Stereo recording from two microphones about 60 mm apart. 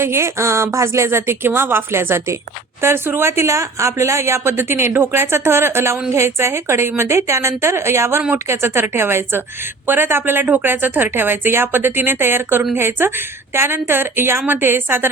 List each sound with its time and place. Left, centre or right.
0.0 s a woman's voice: right